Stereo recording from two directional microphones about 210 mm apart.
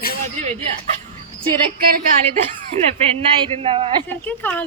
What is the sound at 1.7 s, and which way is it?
Speech, 45° right (ahead or behind).